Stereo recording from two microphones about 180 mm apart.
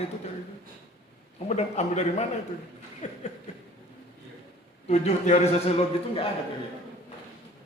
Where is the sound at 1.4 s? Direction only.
40° left (ahead or behind).